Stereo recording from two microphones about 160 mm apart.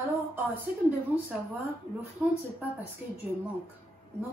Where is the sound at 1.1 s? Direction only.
10° right (ahead or behind).